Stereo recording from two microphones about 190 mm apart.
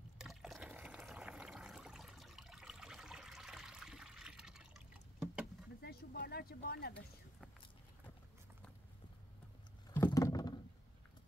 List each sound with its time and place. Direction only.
0.2 s water: centre (ahead or behind)
5.8 s vehicle: 55° left (ahead or behind)
9.9 s rowboat: 15° left (ahead or behind)